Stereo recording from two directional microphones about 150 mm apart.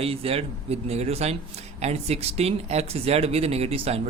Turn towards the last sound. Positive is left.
turn(degrees=-40)  # may be behind; listen again after turning